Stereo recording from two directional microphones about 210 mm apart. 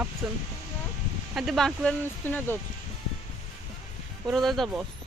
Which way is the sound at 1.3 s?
Centre (ahead or behind).